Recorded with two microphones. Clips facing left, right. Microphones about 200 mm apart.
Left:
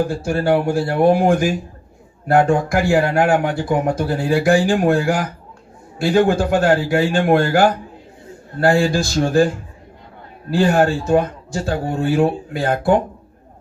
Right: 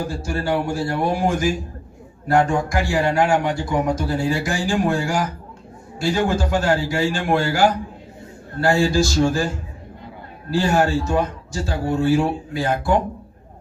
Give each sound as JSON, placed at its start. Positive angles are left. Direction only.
{"t": 0.1, "sound": "speech", "side_deg": 55}
{"t": 10.5, "sound": "speech", "side_deg": 55}